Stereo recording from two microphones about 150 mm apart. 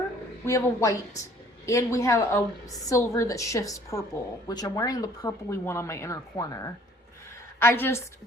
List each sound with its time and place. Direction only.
0.4 s a woman's voice: 20° left (ahead or behind)